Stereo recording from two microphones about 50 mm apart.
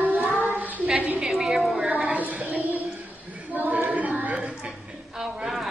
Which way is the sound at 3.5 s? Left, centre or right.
Right.